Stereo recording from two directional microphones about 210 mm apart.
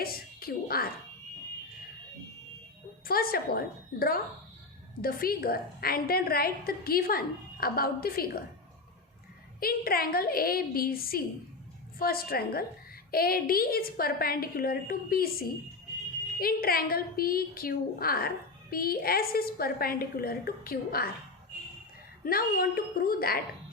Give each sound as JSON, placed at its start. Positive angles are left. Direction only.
{"t": 0.0, "sound": "a woman's voice", "side_deg": 45}
{"t": 3.1, "sound": "a woman's voice", "side_deg": 45}
{"t": 5.0, "sound": "a woman's voice", "side_deg": 45}
{"t": 9.6, "sound": "a woman's voice", "side_deg": 45}
{"t": 16.4, "sound": "a woman's voice", "side_deg": 45}
{"t": 22.2, "sound": "a woman's voice", "side_deg": 45}